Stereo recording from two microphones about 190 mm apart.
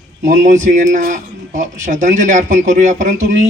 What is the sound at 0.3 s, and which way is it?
A man's voice, 40° right (ahead or behind).